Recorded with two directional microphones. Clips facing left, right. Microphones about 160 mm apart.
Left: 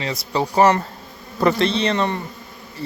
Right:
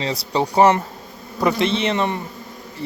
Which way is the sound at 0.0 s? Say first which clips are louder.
Right 1 dB; 30° right (ahead or behind).